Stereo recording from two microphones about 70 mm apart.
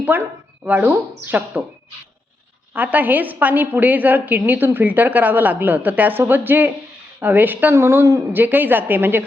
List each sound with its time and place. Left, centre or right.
0.6 s a woman's voice: right
2.7 s a woman's voice: right
7.7 s speech: right
8.3 s a woman's voice: right